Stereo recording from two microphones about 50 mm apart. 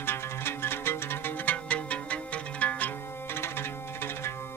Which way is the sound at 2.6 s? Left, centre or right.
Left.